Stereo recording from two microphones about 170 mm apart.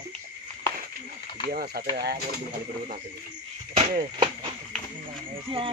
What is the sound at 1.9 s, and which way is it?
Speech, 70° right (ahead or behind).